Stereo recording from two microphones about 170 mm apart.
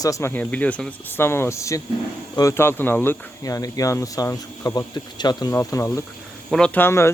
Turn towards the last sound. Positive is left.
turn(degrees=15)  # may be behind; listen again after turning